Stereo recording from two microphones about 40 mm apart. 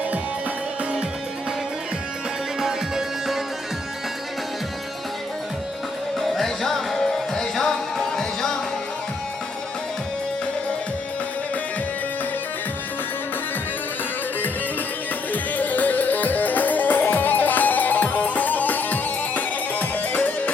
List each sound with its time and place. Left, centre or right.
2.6 s music: centre
6.2 s music: centre
15.3 s music: left